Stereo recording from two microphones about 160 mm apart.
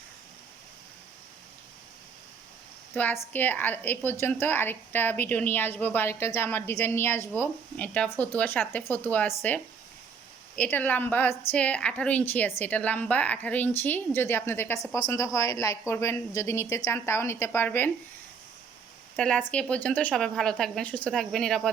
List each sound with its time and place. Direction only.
2.9 s a woman's voice: 10° left (ahead or behind)
19.1 s speech: 5° left (ahead or behind)